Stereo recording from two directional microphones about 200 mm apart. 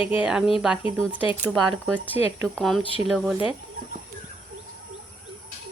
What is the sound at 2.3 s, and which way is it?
Speech, 10° right (ahead or behind).